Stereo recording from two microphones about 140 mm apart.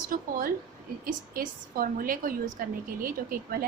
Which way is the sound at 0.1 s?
85° right.